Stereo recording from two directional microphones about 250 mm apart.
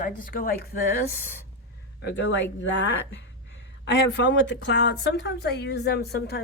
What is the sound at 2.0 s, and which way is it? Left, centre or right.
A woman's voice, left.